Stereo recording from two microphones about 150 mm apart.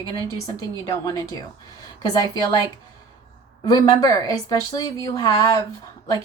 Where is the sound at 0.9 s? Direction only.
25° left (ahead or behind).